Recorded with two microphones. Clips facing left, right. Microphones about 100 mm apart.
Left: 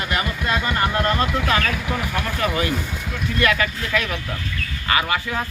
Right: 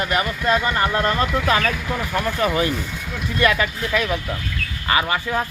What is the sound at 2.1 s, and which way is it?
Speech, 25° right (ahead or behind).